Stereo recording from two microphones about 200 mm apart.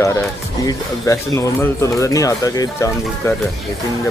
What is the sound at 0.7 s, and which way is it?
Speech, 15° left (ahead or behind).